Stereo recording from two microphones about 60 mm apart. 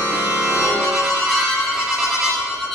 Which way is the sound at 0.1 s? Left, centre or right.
Right.